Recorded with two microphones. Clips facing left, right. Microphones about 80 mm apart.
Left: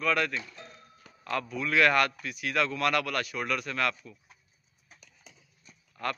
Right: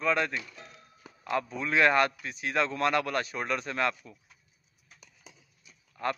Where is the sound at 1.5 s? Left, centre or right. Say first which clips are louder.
Even; right.